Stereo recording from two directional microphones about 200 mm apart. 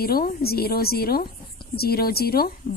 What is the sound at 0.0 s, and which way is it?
A woman's voice, 50° left (ahead or behind).